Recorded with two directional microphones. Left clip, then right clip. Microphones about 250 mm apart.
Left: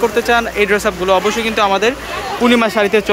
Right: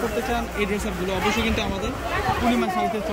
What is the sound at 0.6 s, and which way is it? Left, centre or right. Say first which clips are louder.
Speech: left 12 dB; centre.